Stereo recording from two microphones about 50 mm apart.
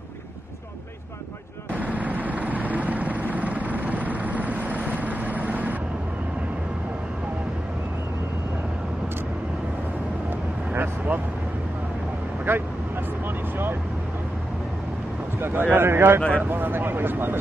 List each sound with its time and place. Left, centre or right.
1.7 s vehicle: right
10.7 s vehicle: right
12.5 s vehicle: right
15.4 s speech: right
16.2 s speech: left
16.4 s speech: right